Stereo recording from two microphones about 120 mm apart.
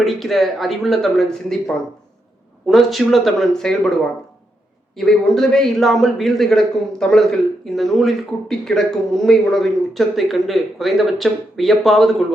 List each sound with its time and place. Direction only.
0.0 s a man's voice: centre (ahead or behind)
4.9 s a man's voice: 5° left (ahead or behind)